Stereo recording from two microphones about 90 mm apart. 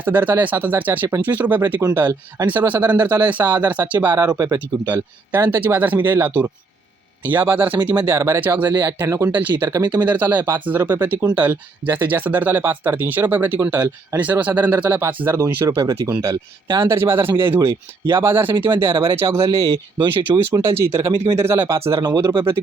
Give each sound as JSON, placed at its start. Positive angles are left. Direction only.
{"t": 0.0, "sound": "speech", "side_deg": -20}
{"t": 4.2, "sound": "speech", "side_deg": -40}
{"t": 4.9, "sound": "speech", "side_deg": -20}
{"t": 19.5, "sound": "speech", "side_deg": -40}
{"t": 20.0, "sound": "speech", "side_deg": -60}
{"t": 20.5, "sound": "speech", "side_deg": -30}
{"t": 22.0, "sound": "speech", "side_deg": -50}